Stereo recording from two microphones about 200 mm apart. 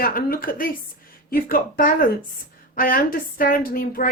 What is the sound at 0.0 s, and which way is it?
A woman's voice, 45° left (ahead or behind).